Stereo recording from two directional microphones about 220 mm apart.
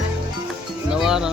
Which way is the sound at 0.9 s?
5° right (ahead or behind).